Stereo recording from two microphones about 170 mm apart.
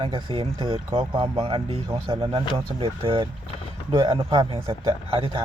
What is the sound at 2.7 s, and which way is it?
Speech, 30° right (ahead or behind).